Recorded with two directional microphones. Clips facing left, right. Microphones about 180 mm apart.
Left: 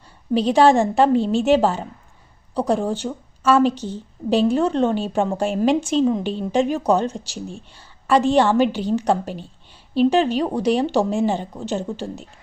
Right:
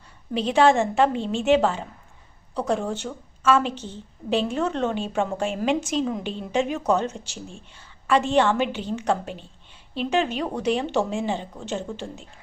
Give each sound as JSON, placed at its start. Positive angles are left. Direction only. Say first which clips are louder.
{"t": 0.3, "sound": "a woman's voice", "louder": "left 4 dB", "side_deg": 35}